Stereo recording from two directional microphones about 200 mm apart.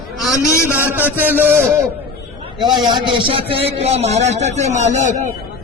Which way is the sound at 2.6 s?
20° right (ahead or behind).